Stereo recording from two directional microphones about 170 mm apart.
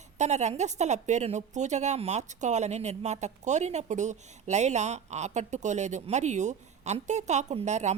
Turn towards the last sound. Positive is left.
turn(degrees=-45)  # may be behind; listen again after turning